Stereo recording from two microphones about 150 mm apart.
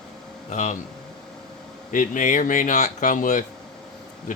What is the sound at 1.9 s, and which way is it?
Speech, 60° left (ahead or behind).